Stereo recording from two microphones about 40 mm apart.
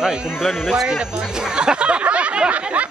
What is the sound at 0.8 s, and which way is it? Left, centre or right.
Speech, centre.